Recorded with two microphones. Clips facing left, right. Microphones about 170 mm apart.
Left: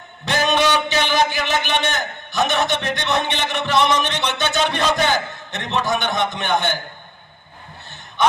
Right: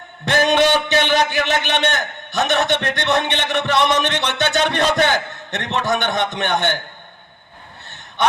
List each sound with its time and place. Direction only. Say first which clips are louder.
0.3 s a man's voice: right 3 dB; 55° right (ahead or behind)